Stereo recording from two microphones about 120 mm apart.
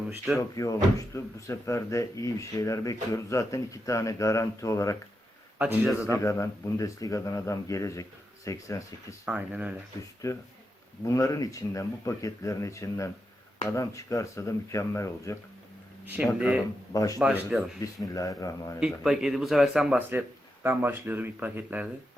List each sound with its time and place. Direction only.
0.5 s speech: 30° left (ahead or behind)
6.1 s speech: 25° left (ahead or behind)
9.2 s a man's voice: 10° right (ahead or behind)
10.2 s speech: 30° left (ahead or behind)
16.0 s a man's voice: 10° right (ahead or behind)
16.9 s speech: 30° left (ahead or behind)
17.2 s speech: 5° right (ahead or behind)
18.0 s speech: 30° left (ahead or behind)
18.8 s a man's voice: 5° right (ahead or behind)